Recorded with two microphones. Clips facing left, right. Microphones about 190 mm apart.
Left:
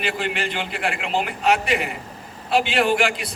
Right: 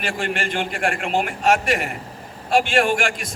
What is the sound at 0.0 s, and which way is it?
A man's voice, 45° right (ahead or behind).